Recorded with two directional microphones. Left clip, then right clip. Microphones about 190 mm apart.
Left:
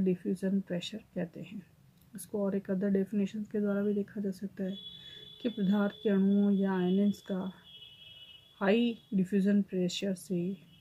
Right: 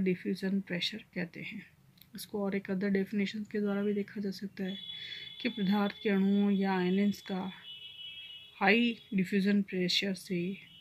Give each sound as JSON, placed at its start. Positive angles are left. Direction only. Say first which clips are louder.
{"t": 0.0, "sound": "speech", "louder": "left 1 dB", "side_deg": 0}
{"t": 8.5, "sound": "speech", "louder": "right 2 dB", "side_deg": 0}